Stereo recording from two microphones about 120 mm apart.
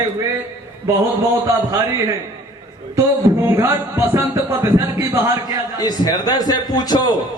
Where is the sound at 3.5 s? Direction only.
20° right (ahead or behind).